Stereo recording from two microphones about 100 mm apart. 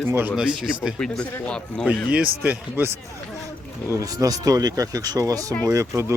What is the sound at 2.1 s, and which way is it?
Speech, 10° right (ahead or behind).